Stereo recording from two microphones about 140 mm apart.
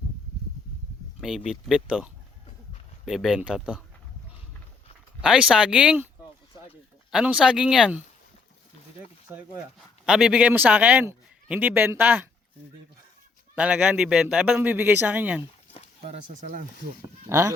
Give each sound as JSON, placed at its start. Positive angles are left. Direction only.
{"t": 1.5, "sound": "speech", "side_deg": -5}
{"t": 3.1, "sound": "speech", "side_deg": 0}
{"t": 5.2, "sound": "a man's voice", "side_deg": -5}
{"t": 7.1, "sound": "speech", "side_deg": -5}
{"t": 9.3, "sound": "a man's voice", "side_deg": -20}
{"t": 10.1, "sound": "a man's voice", "side_deg": -5}
{"t": 13.6, "sound": "a man's voice", "side_deg": -10}
{"t": 16.0, "sound": "speech", "side_deg": -65}
{"t": 17.2, "sound": "speech", "side_deg": -20}